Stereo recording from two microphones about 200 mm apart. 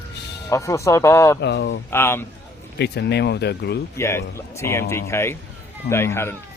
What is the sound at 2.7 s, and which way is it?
Speech, 55° left (ahead or behind).